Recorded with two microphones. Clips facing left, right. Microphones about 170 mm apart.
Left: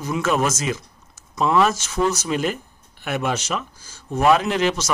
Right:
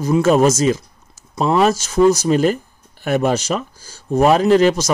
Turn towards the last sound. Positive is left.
turn(degrees=-40)  # may be behind; listen again after turning